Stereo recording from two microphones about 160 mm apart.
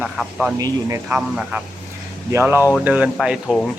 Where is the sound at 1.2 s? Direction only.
5° right (ahead or behind).